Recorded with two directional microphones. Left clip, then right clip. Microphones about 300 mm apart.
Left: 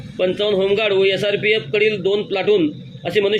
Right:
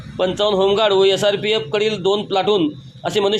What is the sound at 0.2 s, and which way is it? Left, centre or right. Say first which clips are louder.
A man's voice: right 1 dB; centre.